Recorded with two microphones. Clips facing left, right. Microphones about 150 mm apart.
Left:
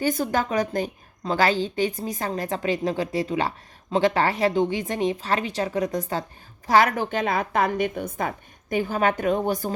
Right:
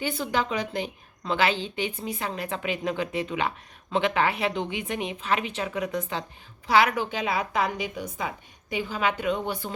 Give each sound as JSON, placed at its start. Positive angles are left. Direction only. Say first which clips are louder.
{"t": 0.0, "sound": "a woman's voice", "louder": "left 4 dB", "side_deg": 45}